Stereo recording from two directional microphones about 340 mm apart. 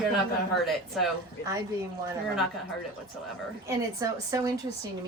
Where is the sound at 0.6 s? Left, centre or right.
Centre.